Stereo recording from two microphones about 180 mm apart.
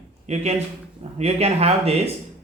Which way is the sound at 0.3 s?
40° right (ahead or behind).